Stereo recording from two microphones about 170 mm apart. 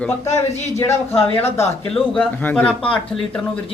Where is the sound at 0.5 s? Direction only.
40° left (ahead or behind).